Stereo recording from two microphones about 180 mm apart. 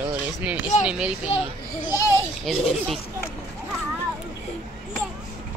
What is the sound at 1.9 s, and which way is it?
Babbling, 15° left (ahead or behind).